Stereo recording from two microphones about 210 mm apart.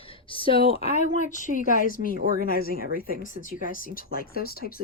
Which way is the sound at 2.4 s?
45° left (ahead or behind).